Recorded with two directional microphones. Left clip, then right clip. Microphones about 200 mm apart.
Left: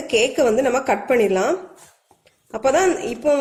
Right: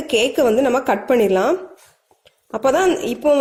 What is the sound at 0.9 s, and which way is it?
A woman's voice, 45° right (ahead or behind).